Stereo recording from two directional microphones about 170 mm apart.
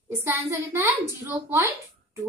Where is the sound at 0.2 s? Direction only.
15° right (ahead or behind).